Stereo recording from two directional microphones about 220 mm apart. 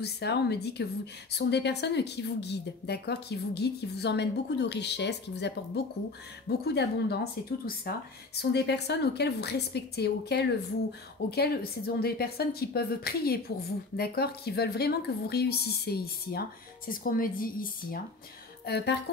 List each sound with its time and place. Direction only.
0.0 s a woman's voice: 50° left (ahead or behind)
6.6 s a woman's voice: 50° left (ahead or behind)
8.4 s a woman's voice: 50° left (ahead or behind)